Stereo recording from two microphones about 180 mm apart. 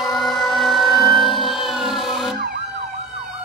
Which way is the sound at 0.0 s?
Centre (ahead or behind).